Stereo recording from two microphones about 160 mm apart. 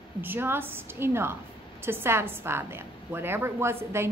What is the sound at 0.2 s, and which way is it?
A woman's voice, 15° right (ahead or behind).